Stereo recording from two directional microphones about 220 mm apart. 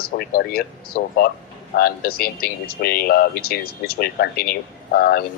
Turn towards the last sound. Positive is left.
turn(degrees=45)  # may be behind; listen again after turning